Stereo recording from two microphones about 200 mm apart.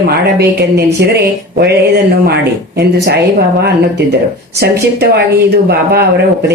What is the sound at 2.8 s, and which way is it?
Speech, 55° right (ahead or behind).